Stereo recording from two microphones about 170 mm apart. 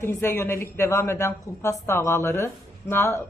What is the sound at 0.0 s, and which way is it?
A woman's voice, 15° left (ahead or behind).